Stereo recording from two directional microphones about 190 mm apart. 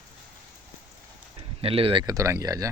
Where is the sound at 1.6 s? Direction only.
30° right (ahead or behind).